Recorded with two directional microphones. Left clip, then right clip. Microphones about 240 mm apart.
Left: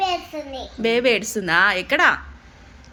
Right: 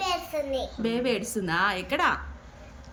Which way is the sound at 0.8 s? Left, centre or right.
Centre.